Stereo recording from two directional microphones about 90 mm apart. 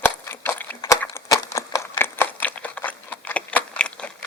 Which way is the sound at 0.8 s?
35° left (ahead or behind).